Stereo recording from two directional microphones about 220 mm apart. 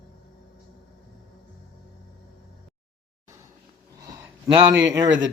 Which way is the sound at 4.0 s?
10° right (ahead or behind).